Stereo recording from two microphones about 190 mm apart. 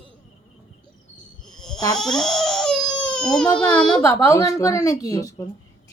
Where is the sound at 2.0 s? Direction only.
Centre (ahead or behind).